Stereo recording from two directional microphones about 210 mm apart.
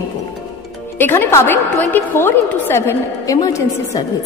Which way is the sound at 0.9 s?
10° left (ahead or behind).